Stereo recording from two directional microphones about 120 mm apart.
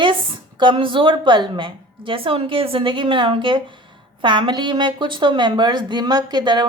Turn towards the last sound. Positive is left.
turn(degrees=-40)  # may be behind; listen again after turning